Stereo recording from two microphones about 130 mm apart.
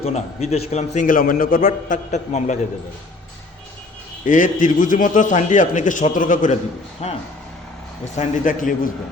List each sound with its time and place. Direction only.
0.0 s a man's voice: 55° left (ahead or behind)
4.3 s a man's voice: 80° left
7.0 s a man's voice: 55° left (ahead or behind)
8.1 s a man's voice: 75° left (ahead or behind)